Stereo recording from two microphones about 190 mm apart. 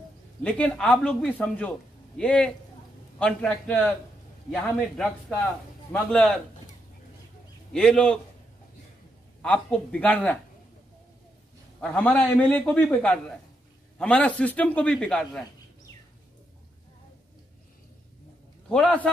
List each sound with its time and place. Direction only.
0.4 s a man's voice: 5° left (ahead or behind)
7.7 s a man's voice: 5° left (ahead or behind)
9.4 s speech: 5° left (ahead or behind)
11.8 s a man's voice: 5° left (ahead or behind)
18.7 s a man's voice: 5° left (ahead or behind)